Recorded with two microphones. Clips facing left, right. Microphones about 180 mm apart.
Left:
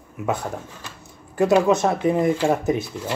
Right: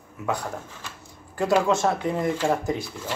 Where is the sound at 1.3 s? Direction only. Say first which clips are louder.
Left 4 dB; 20° left (ahead or behind).